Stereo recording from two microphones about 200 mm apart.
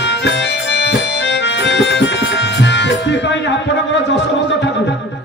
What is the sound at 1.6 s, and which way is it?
Music, 60° left (ahead or behind).